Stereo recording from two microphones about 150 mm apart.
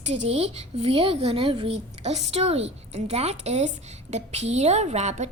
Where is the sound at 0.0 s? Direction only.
45° right (ahead or behind).